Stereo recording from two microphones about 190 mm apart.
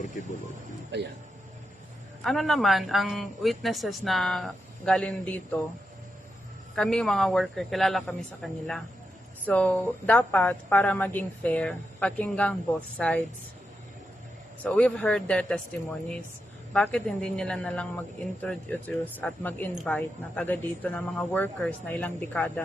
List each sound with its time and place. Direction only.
0.9 s speech: 65° right (ahead or behind)
2.2 s speech: centre (ahead or behind)
6.7 s a woman's voice: 5° left (ahead or behind)
14.6 s speech: 5° left (ahead or behind)
16.7 s a woman's voice: 5° left (ahead or behind)